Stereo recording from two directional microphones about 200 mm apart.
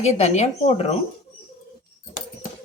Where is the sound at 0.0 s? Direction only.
35° left (ahead or behind).